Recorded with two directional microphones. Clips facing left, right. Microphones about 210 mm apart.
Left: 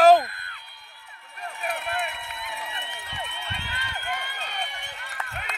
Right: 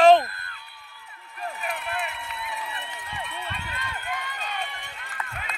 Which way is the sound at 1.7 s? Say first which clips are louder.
Left 1 dB; 70° left (ahead or behind).